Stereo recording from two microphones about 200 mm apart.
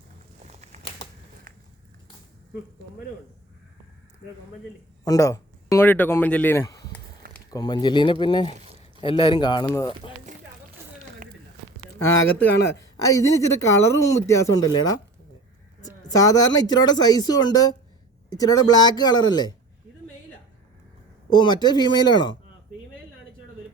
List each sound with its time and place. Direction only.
0.4 s a sound: 35° right (ahead or behind)
5.0 s speech: 15° left (ahead or behind)
13.1 s speech: 15° left (ahead or behind)
16.0 s speech: 20° left (ahead or behind)
21.2 s speech: 20° left (ahead or behind)